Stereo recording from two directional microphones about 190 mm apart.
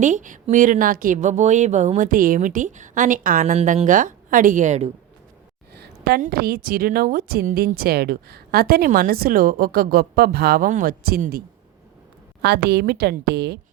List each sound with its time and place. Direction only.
0.0 s a woman's voice: 40° right (ahead or behind)
5.7 s a woman's voice: 55° right (ahead or behind)